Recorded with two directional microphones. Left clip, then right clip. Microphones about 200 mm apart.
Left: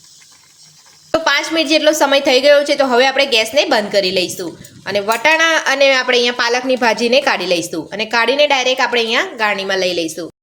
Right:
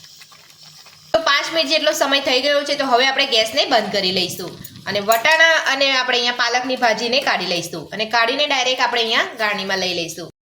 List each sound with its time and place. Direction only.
1.1 s a woman's voice: 45° left (ahead or behind)